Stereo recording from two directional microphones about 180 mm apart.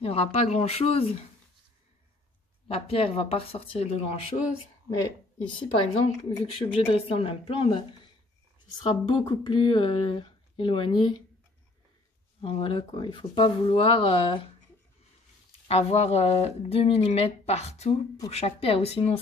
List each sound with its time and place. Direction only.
0.0 s speech: 35° left (ahead or behind)
2.7 s speech: 30° left (ahead or behind)
5.7 s speech: 35° left (ahead or behind)
8.8 s speech: 25° left (ahead or behind)
12.4 s speech: 30° left (ahead or behind)
15.7 s speech: 35° left (ahead or behind)